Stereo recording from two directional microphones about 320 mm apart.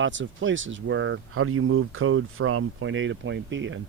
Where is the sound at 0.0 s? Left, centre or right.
Right.